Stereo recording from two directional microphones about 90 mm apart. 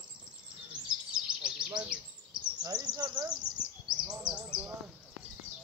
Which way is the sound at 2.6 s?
45° right (ahead or behind).